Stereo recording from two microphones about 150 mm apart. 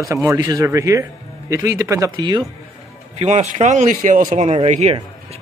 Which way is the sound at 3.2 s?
45° right (ahead or behind).